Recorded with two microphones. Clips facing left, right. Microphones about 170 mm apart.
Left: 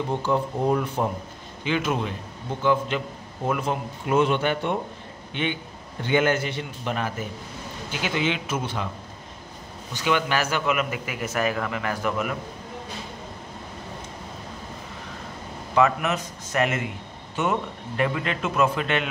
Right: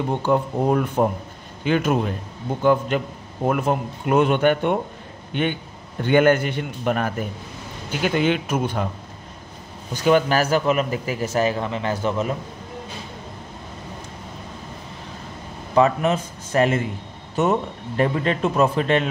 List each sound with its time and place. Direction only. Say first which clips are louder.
0.2 s speech: right 5 dB; 55° right (ahead or behind)
10.0 s a man's voice: right 6 dB; 40° right (ahead or behind)
15.7 s a man's voice: right 4 dB; 30° right (ahead or behind)